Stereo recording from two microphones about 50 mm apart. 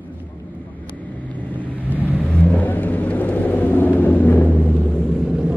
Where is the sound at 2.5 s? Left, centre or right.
Left.